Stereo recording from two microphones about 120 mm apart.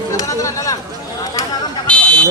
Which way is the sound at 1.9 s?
10° left (ahead or behind).